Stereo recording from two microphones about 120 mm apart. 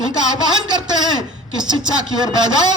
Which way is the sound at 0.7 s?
35° right (ahead or behind).